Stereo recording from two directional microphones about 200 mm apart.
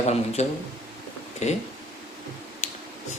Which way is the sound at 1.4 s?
35° left (ahead or behind).